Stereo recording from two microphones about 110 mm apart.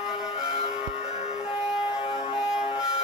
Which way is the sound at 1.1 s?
85° left.